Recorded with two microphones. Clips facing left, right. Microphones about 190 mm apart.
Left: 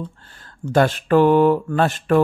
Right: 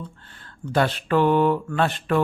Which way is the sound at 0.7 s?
45° left (ahead or behind).